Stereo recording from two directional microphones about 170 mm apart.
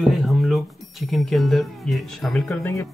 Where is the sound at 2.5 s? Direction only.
15° left (ahead or behind).